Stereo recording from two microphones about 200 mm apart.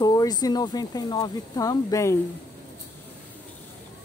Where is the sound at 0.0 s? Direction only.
20° left (ahead or behind).